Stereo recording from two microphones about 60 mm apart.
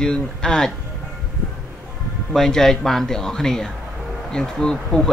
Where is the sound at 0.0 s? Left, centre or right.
Centre.